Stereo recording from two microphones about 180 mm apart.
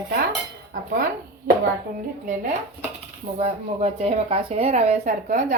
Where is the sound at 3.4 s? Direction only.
40° right (ahead or behind).